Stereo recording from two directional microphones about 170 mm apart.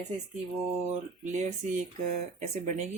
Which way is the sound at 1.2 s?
45° right (ahead or behind).